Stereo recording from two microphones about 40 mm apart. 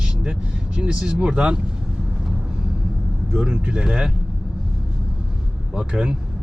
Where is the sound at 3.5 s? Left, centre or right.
Right.